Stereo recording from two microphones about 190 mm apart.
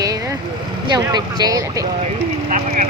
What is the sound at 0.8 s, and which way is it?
Speech, 20° right (ahead or behind).